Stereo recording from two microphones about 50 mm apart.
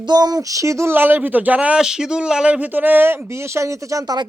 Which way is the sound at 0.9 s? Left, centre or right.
Right.